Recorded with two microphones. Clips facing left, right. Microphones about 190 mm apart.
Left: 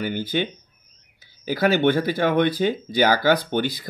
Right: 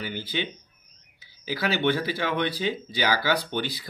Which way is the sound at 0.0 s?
50° left (ahead or behind).